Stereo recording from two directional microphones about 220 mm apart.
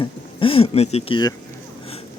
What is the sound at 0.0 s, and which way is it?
Speech, 25° left (ahead or behind).